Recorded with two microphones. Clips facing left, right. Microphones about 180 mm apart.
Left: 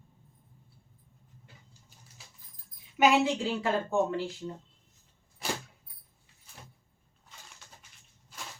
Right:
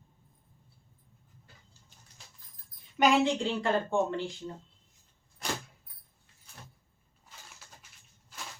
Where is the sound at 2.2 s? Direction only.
5° left (ahead or behind).